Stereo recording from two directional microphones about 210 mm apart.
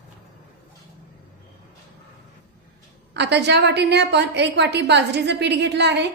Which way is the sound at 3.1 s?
55° right (ahead or behind).